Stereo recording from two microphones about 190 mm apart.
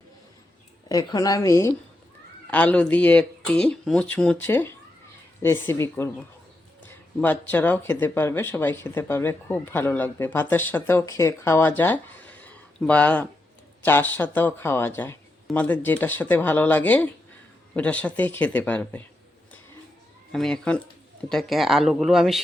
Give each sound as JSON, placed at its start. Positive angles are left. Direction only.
{"t": 0.9, "sound": "speech", "side_deg": 20}
{"t": 7.2, "sound": "speech", "side_deg": 10}
{"t": 11.8, "sound": "a sound", "side_deg": 10}
{"t": 13.8, "sound": "speech", "side_deg": 10}
{"t": 20.3, "sound": "speech", "side_deg": 5}